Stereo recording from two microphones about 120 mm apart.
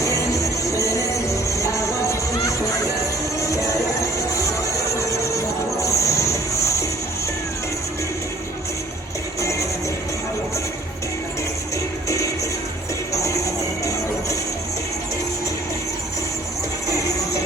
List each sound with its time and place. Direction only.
0.0 s music: 25° left (ahead or behind)
9.4 s music: 25° left (ahead or behind)
12.0 s music: 25° left (ahead or behind)